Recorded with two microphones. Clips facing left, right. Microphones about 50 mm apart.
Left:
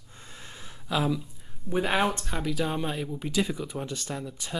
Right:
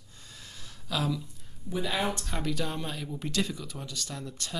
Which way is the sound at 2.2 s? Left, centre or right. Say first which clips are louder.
Left 3 dB; centre.